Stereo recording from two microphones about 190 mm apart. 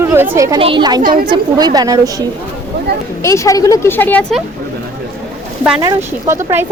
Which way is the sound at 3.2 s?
15° left (ahead or behind).